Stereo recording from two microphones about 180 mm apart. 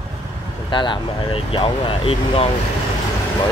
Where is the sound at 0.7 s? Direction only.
25° left (ahead or behind).